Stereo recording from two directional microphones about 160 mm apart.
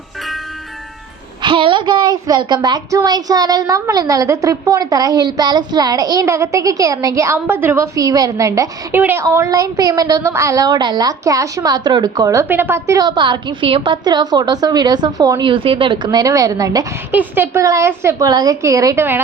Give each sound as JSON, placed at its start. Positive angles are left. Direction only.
{"t": 1.4, "sound": "a woman's voice", "side_deg": -30}
{"t": 16.0, "sound": "a woman's voice", "side_deg": -20}